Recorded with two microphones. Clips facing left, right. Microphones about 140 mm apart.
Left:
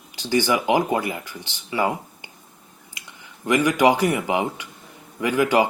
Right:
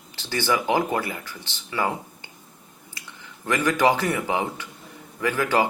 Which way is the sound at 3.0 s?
15° left (ahead or behind).